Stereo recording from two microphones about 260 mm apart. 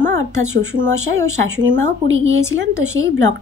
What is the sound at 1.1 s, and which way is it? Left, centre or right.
Speech, right.